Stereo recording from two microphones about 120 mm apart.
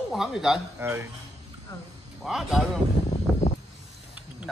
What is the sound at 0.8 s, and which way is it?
Speech, 20° right (ahead or behind).